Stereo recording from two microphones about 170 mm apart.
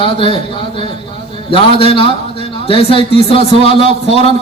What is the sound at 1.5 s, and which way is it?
A man's voice, 35° left (ahead or behind).